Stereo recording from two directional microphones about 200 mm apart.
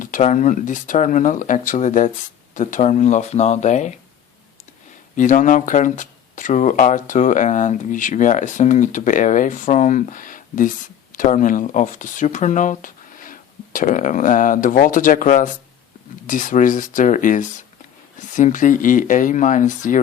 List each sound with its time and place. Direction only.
0.0 s speech: 40° left (ahead or behind)
5.1 s speech: 40° left (ahead or behind)